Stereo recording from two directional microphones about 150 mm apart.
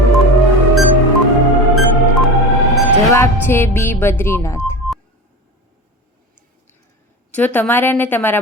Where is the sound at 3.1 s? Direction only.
15° left (ahead or behind).